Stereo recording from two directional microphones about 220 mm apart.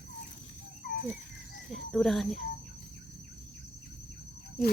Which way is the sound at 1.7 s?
Centre (ahead or behind).